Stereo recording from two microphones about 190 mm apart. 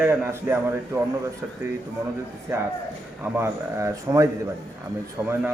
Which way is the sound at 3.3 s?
15° right (ahead or behind).